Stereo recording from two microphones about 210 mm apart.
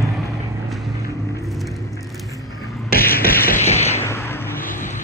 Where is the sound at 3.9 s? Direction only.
10° left (ahead or behind).